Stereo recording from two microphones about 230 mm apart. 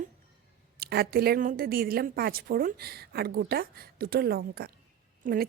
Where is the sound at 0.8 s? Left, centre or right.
Right.